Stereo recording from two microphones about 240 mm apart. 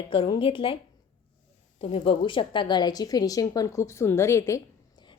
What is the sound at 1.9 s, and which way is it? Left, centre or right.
A woman's voice, left.